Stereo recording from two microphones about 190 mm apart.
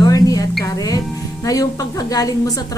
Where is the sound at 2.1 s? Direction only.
20° left (ahead or behind).